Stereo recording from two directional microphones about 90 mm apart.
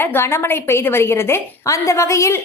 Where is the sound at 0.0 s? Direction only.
25° left (ahead or behind).